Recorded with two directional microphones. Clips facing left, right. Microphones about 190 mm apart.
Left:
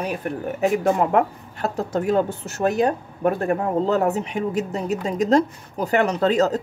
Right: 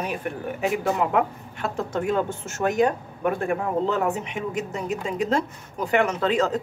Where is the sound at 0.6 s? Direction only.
45° left (ahead or behind).